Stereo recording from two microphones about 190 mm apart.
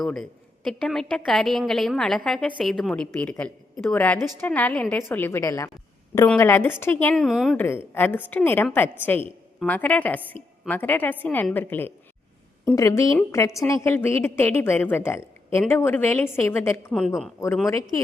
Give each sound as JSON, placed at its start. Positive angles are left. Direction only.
{"t": 0.0, "sound": "a woman's voice", "side_deg": 5}
{"t": 7.6, "sound": "a woman's voice", "side_deg": 10}